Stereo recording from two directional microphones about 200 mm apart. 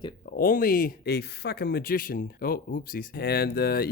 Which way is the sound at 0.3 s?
45° left (ahead or behind).